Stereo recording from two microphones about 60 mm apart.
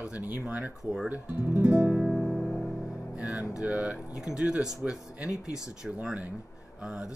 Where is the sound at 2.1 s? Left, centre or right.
Centre.